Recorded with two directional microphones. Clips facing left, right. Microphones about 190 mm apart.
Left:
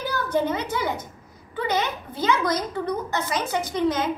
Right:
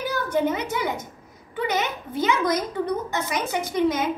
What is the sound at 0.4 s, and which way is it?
A woman's voice, 15° right (ahead or behind).